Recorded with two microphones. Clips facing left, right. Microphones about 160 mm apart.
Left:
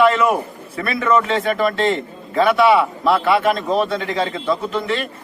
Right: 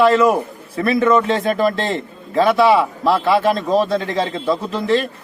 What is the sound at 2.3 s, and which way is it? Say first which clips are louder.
A man's voice: right 1 dB; 30° right (ahead or behind).